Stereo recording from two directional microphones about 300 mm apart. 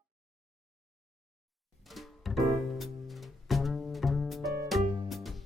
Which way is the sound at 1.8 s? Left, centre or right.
Centre.